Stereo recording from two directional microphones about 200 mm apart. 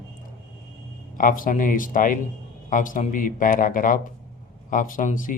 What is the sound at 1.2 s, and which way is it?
Speech, 45° left (ahead or behind).